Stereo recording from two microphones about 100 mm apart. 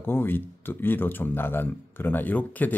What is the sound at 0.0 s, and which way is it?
Speech, 20° left (ahead or behind).